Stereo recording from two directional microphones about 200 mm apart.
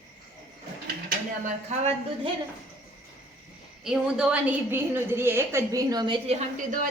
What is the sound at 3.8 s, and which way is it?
A woman's voice, 5° right (ahead or behind).